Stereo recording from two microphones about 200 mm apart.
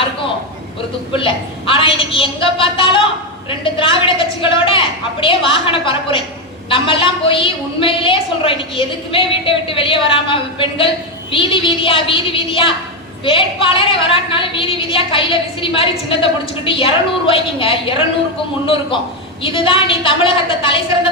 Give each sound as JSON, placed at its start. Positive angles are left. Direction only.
{"t": 1.1, "sound": "a woman's voice", "side_deg": 25}